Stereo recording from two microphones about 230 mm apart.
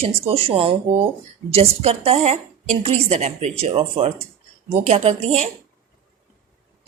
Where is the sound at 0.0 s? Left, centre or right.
Right.